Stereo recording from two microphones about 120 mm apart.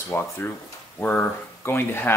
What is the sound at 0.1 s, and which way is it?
Speech, 20° left (ahead or behind).